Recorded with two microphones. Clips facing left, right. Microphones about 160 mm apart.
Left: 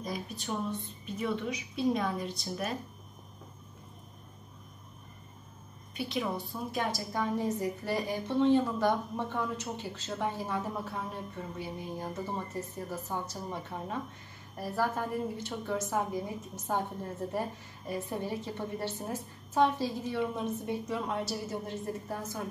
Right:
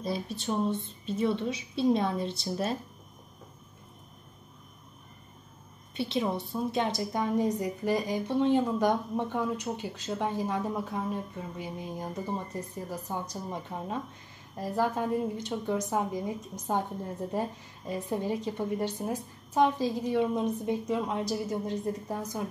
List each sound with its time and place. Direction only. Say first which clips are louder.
0.0 s a woman's voice: right 5 dB; 30° right (ahead or behind)
5.9 s a woman's voice: right 4 dB; 25° right (ahead or behind)